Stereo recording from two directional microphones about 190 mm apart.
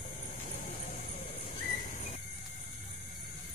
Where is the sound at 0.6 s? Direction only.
45° left (ahead or behind).